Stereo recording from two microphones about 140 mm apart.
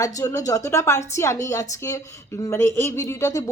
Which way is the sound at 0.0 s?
25° left (ahead or behind).